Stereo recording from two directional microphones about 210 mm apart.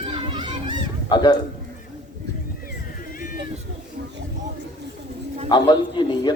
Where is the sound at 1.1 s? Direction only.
20° left (ahead or behind).